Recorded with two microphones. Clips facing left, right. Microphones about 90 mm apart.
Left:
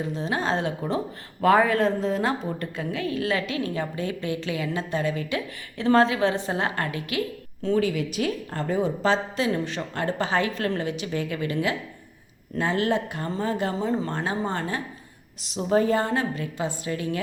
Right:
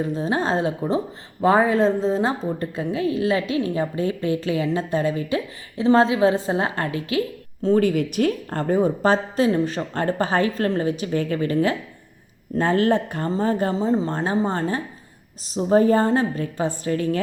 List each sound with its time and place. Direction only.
0.3 s a woman's voice: 35° right (ahead or behind)
7.8 s a woman's voice: 50° right (ahead or behind)